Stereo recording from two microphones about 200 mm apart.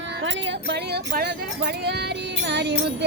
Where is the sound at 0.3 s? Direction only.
60° right (ahead or behind).